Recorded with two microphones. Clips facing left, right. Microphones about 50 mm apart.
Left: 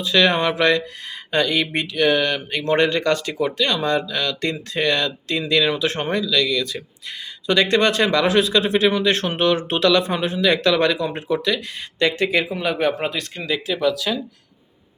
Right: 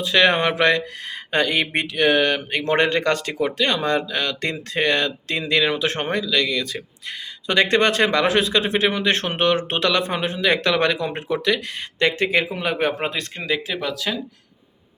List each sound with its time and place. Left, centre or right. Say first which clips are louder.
0.0 s speech: even; right
13.3 s speech: left 1 dB; right